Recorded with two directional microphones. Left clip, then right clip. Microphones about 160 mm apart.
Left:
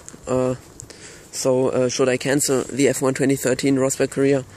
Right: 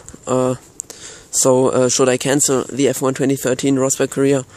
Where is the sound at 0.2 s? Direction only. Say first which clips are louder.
Right 4 dB; 35° right (ahead or behind).